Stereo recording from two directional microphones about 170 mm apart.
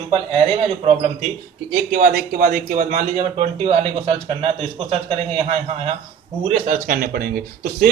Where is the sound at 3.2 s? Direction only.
40° right (ahead or behind).